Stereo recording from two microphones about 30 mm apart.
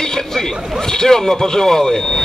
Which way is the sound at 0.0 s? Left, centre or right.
Centre.